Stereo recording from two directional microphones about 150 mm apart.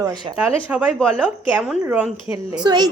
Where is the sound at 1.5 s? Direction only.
10° right (ahead or behind).